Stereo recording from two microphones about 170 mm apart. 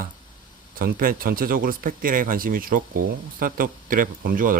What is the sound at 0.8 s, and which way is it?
Speech, 60° right (ahead or behind).